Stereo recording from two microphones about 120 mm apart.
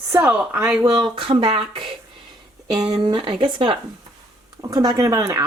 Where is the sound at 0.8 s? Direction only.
35° right (ahead or behind).